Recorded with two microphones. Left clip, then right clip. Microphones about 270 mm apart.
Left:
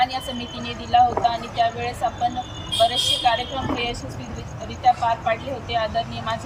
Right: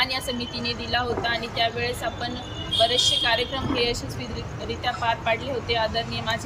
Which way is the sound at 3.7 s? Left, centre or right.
Centre.